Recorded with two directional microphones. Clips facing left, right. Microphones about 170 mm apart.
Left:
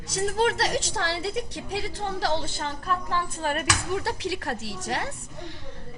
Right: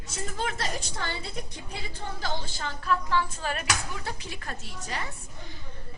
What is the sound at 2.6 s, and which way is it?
Speech, 45° left (ahead or behind).